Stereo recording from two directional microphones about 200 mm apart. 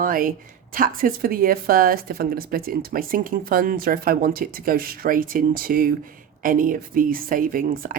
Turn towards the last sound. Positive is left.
turn(degrees=-45)  # may be behind; listen again after turning